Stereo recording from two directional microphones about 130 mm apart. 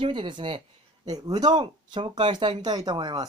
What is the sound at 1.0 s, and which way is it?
Speech, 30° right (ahead or behind).